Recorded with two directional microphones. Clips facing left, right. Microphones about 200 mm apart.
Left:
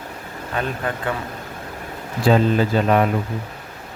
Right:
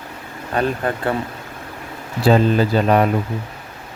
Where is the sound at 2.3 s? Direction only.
35° right (ahead or behind).